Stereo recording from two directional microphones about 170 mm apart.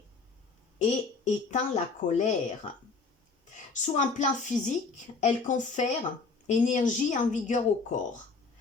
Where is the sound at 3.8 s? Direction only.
45° left (ahead or behind).